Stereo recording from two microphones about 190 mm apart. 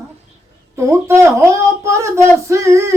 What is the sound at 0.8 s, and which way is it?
Speech, 15° right (ahead or behind).